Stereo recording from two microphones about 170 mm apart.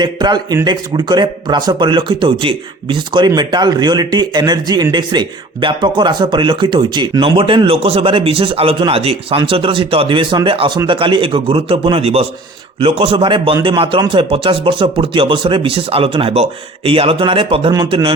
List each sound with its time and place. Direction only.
0.0 s a man's voice: 25° right (ahead or behind)